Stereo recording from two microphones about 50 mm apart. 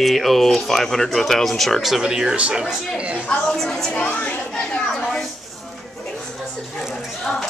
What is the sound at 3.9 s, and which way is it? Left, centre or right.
Speech, left.